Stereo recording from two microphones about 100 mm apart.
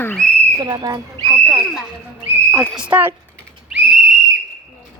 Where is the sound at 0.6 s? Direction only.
40° right (ahead or behind).